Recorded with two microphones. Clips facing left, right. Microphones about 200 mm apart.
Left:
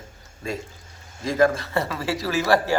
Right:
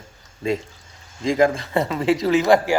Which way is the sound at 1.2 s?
20° right (ahead or behind).